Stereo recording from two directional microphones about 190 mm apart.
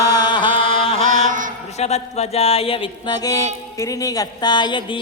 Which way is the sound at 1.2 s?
45° right (ahead or behind).